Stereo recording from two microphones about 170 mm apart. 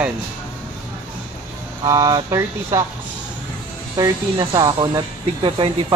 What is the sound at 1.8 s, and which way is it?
Speech, 20° right (ahead or behind).